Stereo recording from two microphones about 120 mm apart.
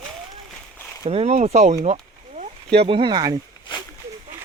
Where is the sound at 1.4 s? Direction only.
90° right; by 1.9 s 70° right (ahead or behind).